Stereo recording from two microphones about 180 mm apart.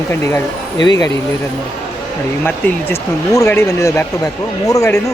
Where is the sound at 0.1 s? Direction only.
15° left (ahead or behind).